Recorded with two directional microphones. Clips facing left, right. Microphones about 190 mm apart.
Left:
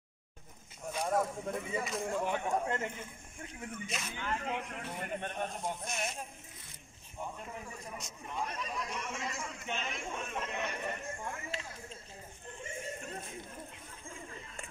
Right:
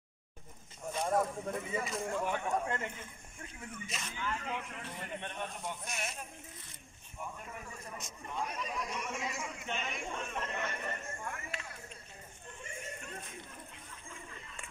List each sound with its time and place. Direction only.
0.8 s a sound: centre (ahead or behind)
2.0 s speech: 15° left (ahead or behind)
3.8 s a man's voice: centre (ahead or behind)
4.2 s speech: 45° left (ahead or behind)
8.0 s a man's voice: centre (ahead or behind)
8.5 s a sound: 5° right (ahead or behind)
8.8 s a man's voice: 5° left (ahead or behind)